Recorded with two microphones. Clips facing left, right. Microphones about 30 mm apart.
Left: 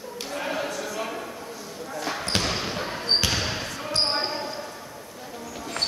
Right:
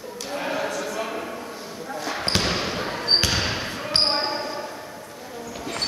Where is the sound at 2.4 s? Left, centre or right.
Right.